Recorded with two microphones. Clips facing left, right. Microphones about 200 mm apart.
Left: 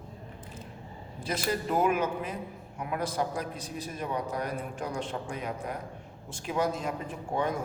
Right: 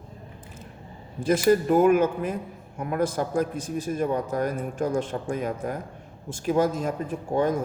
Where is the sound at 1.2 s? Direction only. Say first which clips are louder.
Right 11 dB; 50° right (ahead or behind).